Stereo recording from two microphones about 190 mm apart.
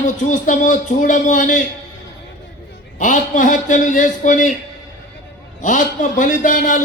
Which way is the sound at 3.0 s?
40° left (ahead or behind).